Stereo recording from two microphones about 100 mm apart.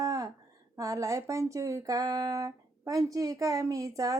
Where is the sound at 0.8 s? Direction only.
30° right (ahead or behind).